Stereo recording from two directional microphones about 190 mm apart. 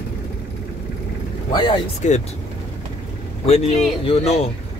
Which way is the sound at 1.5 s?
25° left (ahead or behind).